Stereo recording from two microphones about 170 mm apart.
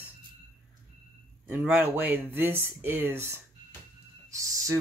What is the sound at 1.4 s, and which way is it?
Speech, 10° right (ahead or behind).